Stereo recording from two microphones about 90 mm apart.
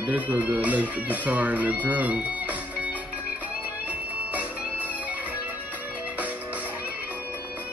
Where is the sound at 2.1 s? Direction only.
15° right (ahead or behind).